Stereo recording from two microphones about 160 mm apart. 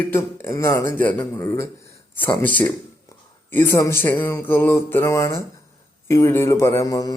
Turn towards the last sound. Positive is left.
turn(degrees=20)  # may be behind; listen again after turning